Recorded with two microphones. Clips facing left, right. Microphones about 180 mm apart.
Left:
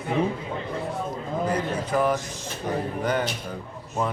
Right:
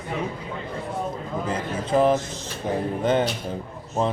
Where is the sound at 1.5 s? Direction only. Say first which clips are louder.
Right 2 dB; 25° right (ahead or behind).